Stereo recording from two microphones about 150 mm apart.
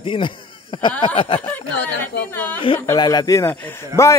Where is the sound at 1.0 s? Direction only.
35° left (ahead or behind).